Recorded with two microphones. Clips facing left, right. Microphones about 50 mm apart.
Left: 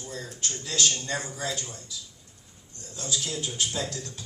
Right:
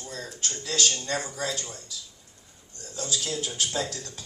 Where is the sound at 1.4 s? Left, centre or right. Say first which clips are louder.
Right 1 dB; left.